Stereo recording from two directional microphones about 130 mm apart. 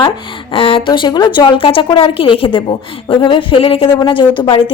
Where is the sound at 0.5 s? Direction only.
45° left (ahead or behind).